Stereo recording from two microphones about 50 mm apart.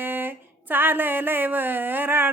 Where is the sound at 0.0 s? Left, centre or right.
Right.